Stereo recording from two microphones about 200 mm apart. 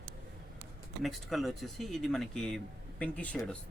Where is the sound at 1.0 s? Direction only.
Centre (ahead or behind).